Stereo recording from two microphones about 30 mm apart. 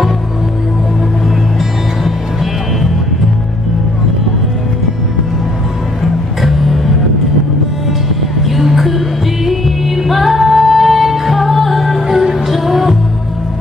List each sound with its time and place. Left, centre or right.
6.4 s music: centre
8.4 s music: centre